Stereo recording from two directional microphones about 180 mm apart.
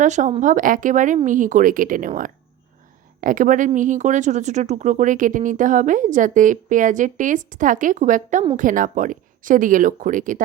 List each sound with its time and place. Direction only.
0.0 s speech: 40° right (ahead or behind)